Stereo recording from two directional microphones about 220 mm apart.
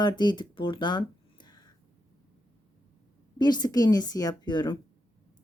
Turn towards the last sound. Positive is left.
turn(degrees=20)  # may be behind; listen again after turning